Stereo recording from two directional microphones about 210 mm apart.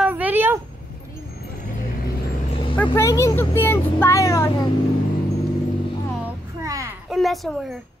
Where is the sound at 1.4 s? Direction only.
40° left (ahead or behind).